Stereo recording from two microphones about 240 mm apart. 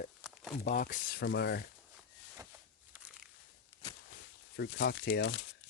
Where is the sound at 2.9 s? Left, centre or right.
Centre.